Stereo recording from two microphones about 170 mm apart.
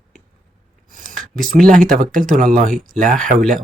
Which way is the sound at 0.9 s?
55° right (ahead or behind).